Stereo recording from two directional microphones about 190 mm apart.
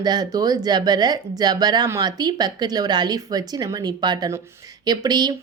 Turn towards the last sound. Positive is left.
turn(degrees=-20)  # may be behind; listen again after turning